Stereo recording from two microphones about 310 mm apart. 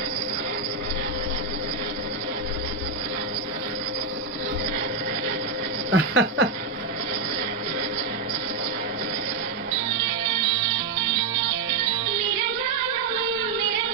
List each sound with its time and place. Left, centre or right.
5.9 s speech: right